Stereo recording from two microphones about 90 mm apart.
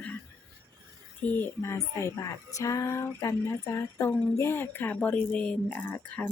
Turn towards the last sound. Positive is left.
turn(degrees=20)  # may be behind; listen again after turning